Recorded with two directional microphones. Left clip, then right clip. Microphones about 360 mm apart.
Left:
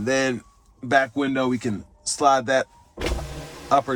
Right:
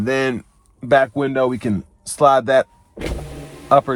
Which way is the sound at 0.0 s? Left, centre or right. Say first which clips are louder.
Right 3 dB; centre.